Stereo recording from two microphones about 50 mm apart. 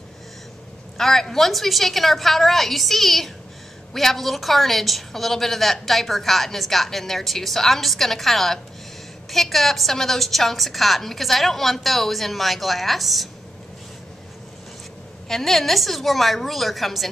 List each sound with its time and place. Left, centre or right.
0.9 s a woman's voice: centre
15.2 s a woman's voice: centre